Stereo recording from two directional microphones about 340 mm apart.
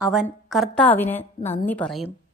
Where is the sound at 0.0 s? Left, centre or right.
Centre.